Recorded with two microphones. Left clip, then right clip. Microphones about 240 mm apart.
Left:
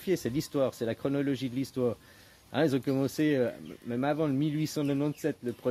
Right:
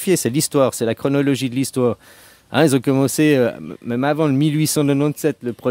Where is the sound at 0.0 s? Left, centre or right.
Right.